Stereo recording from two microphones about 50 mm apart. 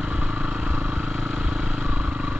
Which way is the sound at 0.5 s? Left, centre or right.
Right.